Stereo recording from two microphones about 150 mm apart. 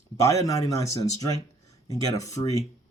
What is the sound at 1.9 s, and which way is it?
Speech, 25° left (ahead or behind).